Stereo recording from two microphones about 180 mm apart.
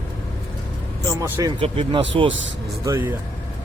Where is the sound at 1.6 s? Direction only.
30° right (ahead or behind).